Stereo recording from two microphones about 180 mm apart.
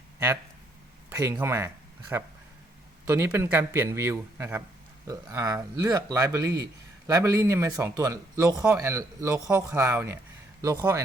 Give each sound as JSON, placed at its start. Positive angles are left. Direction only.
{"t": 1.1, "sound": "speech", "side_deg": -15}